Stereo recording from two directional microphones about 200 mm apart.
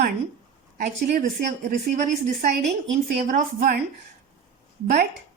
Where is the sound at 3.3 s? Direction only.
45° right (ahead or behind).